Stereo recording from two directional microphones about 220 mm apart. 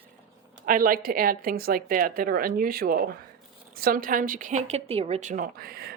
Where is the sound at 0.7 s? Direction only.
40° right (ahead or behind).